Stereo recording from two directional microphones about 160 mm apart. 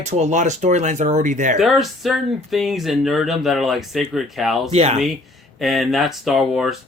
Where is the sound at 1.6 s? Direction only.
Centre (ahead or behind).